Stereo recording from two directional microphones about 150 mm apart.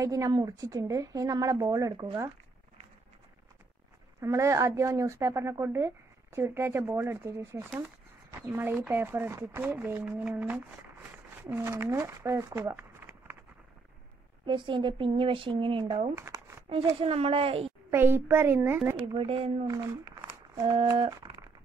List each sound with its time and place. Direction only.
0.0 s speech: 25° right (ahead or behind)
4.2 s speech: 20° right (ahead or behind)
14.4 s speech: 35° right (ahead or behind)
16.2 s shuffling cards: 20° right (ahead or behind)
16.6 s speech: 35° right (ahead or behind)
17.9 s speech: 15° right (ahead or behind)
19.1 s speech: 40° right (ahead or behind)
19.7 s a sound: 25° right (ahead or behind)